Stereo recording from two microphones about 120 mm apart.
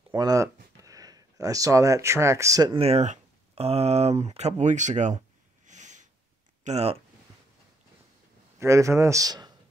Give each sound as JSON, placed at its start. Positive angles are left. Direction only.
{"t": 0.1, "sound": "speech", "side_deg": -30}
{"t": 2.7, "sound": "speech", "side_deg": -55}
{"t": 5.7, "sound": "snort", "side_deg": -90}
{"t": 6.6, "sound": "speech", "side_deg": -60}
{"t": 8.5, "sound": "speech", "side_deg": -25}